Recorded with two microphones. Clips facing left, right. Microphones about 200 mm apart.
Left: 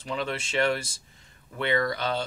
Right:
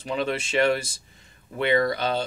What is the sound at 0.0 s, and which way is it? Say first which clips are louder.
Speech: right 4 dB; 15° right (ahead or behind).